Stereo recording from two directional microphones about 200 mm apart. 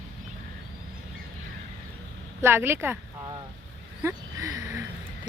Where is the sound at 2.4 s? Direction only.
10° right (ahead or behind).